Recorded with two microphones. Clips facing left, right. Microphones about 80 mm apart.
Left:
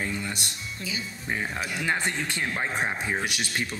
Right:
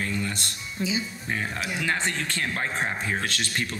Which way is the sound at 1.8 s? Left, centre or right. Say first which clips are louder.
Even; centre.